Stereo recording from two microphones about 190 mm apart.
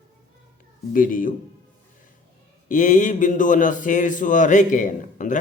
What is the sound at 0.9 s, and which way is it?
Speech, 45° left (ahead or behind).